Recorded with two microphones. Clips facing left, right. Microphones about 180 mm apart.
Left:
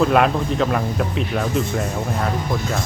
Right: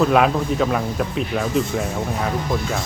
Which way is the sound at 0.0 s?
Centre (ahead or behind).